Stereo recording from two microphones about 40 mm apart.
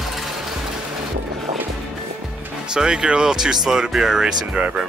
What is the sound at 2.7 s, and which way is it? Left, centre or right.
Speech, right.